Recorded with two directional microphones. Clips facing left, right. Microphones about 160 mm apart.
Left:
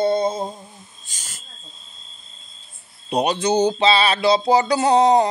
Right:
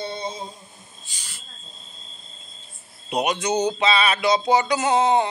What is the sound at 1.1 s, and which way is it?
Speech, 45° left (ahead or behind).